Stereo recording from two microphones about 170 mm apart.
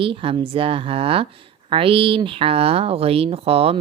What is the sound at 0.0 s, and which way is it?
Speech, 30° right (ahead or behind).